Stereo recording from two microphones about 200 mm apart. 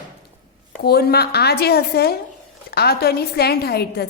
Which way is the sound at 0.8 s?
55° left (ahead or behind).